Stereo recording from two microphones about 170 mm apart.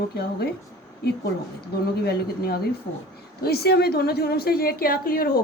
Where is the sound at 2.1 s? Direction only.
65° left (ahead or behind).